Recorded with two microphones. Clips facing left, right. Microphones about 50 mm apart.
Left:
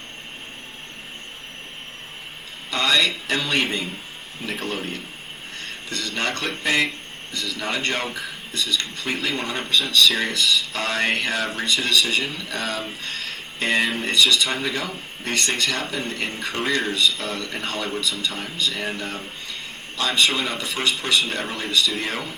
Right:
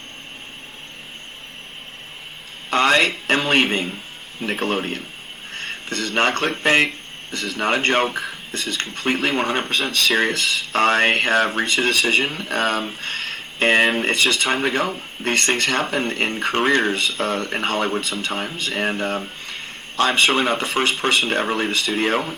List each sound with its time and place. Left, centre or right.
2.6 s speech: right